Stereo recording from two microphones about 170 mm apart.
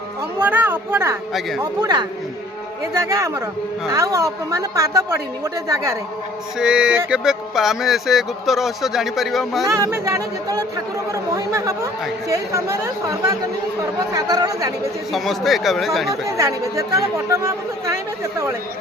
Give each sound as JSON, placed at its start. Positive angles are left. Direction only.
{"t": 0.3, "sound": "a woman's voice", "side_deg": -10}
{"t": 1.3, "sound": "speech", "side_deg": 0}
{"t": 1.8, "sound": "a woman's voice", "side_deg": -25}
{"t": 6.6, "sound": "speech", "side_deg": -5}
{"t": 9.6, "sound": "a woman's voice", "side_deg": -20}
{"t": 15.1, "sound": "speech", "side_deg": 0}
{"t": 16.0, "sound": "a woman's voice", "side_deg": -20}